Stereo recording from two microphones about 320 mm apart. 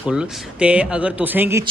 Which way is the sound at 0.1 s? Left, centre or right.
Centre.